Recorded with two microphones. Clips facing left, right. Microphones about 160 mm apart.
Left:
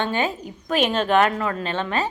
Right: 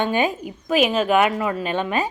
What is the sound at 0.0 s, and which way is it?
A woman's voice, 15° right (ahead or behind).